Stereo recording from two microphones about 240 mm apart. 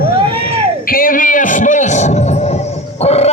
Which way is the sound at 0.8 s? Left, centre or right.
Left.